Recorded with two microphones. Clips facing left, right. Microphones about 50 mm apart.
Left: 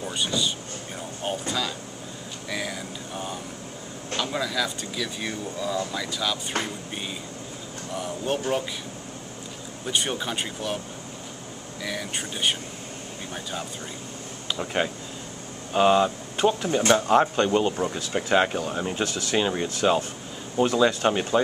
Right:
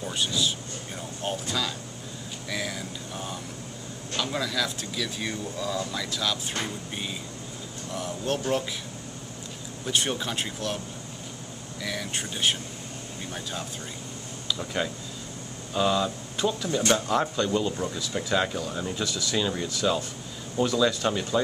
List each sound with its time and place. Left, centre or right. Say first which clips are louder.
0.0 s speech: left 1 dB; centre
7.9 s speech: left 2 dB; centre
9.8 s speech: left 1 dB; centre
11.8 s speech: left 1 dB; centre
14.5 s speech: left 3 dB; left